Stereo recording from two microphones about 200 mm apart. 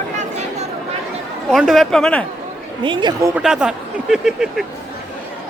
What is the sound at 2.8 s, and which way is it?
Speech, 25° right (ahead or behind).